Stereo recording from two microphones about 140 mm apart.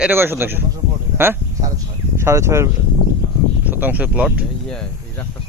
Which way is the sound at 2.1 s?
20° right (ahead or behind).